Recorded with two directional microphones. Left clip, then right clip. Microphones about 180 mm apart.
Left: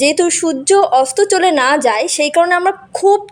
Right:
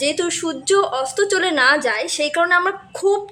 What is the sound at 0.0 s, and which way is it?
A woman's voice, 30° left (ahead or behind).